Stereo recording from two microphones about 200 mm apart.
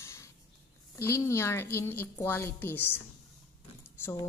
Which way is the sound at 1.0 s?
15° left (ahead or behind).